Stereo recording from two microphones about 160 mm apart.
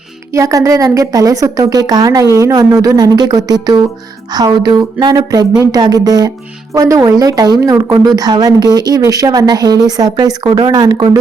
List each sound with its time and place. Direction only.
0.3 s a woman's voice: 20° right (ahead or behind)